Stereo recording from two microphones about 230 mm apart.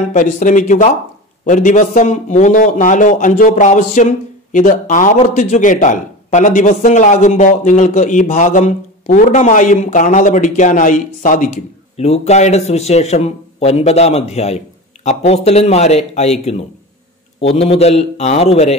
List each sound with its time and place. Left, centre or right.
0.1 s a man's voice: left